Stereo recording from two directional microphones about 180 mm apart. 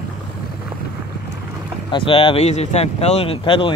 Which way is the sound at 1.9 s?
30° left (ahead or behind).